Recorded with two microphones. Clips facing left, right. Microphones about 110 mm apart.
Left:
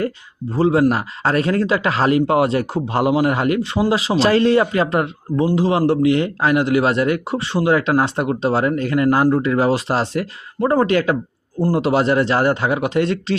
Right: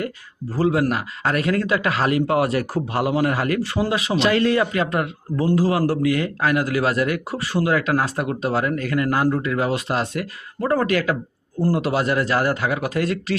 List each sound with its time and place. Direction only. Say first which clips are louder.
0.5 s a man's voice: left 4 dB; 30° left (ahead or behind)